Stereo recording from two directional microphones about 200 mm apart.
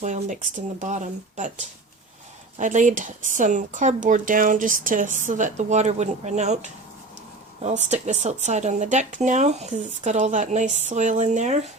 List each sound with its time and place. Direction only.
0.0 s speech: 40° right (ahead or behind)